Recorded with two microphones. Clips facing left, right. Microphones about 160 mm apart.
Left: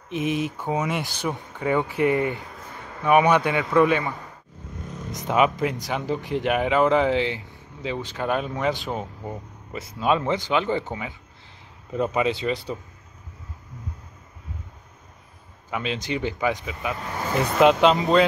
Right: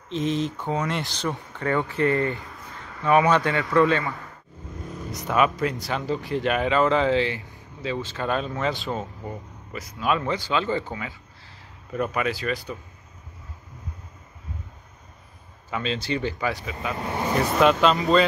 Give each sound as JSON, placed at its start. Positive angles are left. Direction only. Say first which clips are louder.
{"t": 0.1, "sound": "speech", "louder": "even", "side_deg": 10}
{"t": 9.7, "sound": "speech", "louder": "left 3 dB", "side_deg": 25}
{"t": 15.7, "sound": "speech", "louder": "even", "side_deg": 15}
{"t": 17.0, "sound": "speech", "louder": "right 5 dB", "side_deg": -25}
{"t": 17.6, "sound": "speech", "louder": "left 3 dB", "side_deg": 20}